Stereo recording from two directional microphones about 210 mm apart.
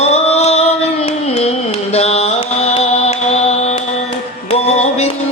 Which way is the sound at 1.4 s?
30° left (ahead or behind).